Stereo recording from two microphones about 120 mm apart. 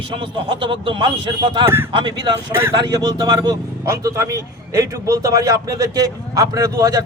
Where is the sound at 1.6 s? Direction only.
20° right (ahead or behind).